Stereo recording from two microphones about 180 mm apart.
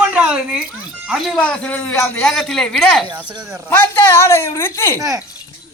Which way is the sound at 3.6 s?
10° left (ahead or behind).